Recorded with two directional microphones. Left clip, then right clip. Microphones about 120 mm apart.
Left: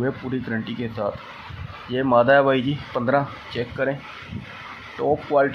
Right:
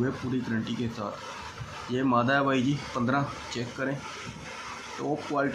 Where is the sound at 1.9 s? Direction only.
35° left (ahead or behind).